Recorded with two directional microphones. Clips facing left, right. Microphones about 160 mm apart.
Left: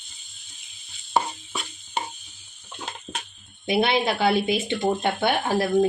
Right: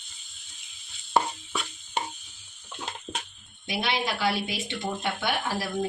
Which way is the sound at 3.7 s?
55° left (ahead or behind).